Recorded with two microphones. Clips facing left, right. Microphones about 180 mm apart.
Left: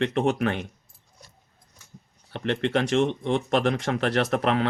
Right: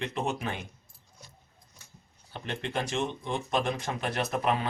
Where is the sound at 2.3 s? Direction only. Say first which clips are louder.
Left 9 dB; 70° left (ahead or behind).